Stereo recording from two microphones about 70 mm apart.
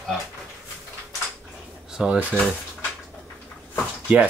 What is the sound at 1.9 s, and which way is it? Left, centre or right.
Drawer open or close, centre.